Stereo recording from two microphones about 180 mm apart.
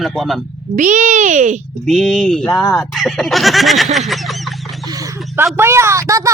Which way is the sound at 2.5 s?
20° left (ahead or behind).